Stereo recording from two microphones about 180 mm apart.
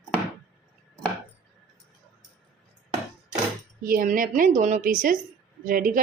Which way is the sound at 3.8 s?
50° right (ahead or behind).